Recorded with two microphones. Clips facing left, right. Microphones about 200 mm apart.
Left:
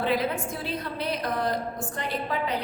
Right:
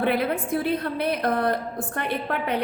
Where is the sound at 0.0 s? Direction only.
60° right (ahead or behind).